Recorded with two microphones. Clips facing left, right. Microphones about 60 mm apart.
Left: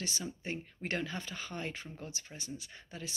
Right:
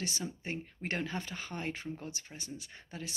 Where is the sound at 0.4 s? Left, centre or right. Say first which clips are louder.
Even; right.